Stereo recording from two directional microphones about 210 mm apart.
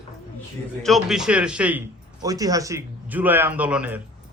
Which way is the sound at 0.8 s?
Centre (ahead or behind).